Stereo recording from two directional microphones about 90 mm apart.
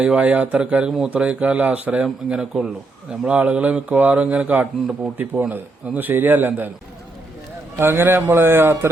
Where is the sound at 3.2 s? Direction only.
15° right (ahead or behind).